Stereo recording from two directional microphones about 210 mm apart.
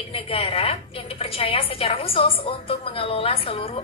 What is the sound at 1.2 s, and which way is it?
A woman's voice, 25° left (ahead or behind).